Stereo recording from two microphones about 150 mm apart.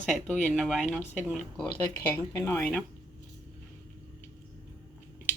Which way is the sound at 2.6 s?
5° left (ahead or behind).